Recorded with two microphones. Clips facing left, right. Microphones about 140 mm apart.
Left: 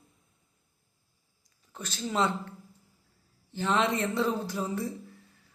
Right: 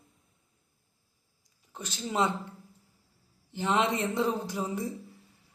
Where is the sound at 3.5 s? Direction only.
15° right (ahead or behind).